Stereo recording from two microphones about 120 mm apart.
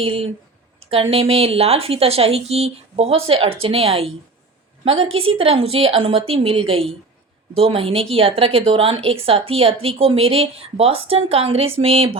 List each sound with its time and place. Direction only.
0.0 s a woman's voice: 50° right (ahead or behind)